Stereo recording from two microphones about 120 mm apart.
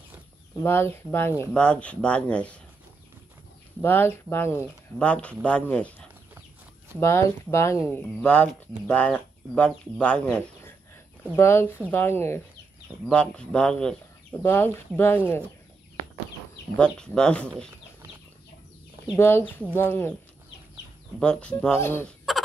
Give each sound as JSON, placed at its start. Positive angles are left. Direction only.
{"t": 0.6, "sound": "speech", "side_deg": 20}
{"t": 3.8, "sound": "speech", "side_deg": 15}
{"t": 7.0, "sound": "speech", "side_deg": 20}
{"t": 7.9, "sound": "speech", "side_deg": 10}
{"t": 11.3, "sound": "speech", "side_deg": 20}
{"t": 13.0, "sound": "speech", "side_deg": 10}
{"t": 14.4, "sound": "speech", "side_deg": 20}
{"t": 16.7, "sound": "speech", "side_deg": 5}
{"t": 19.1, "sound": "speech", "side_deg": 20}
{"t": 21.2, "sound": "speech", "side_deg": 10}
{"t": 21.7, "sound": "speech", "side_deg": 20}
{"t": 22.3, "sound": "fowl", "side_deg": 0}